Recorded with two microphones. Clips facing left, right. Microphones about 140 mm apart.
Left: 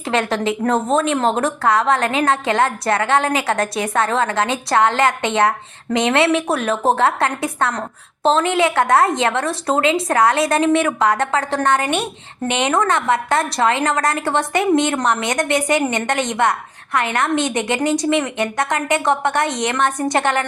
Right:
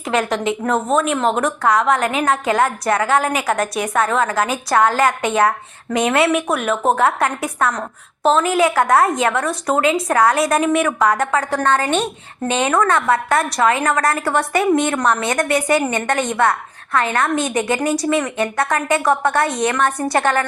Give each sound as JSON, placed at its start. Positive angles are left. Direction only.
{"t": 0.0, "sound": "a woman's voice", "side_deg": 25}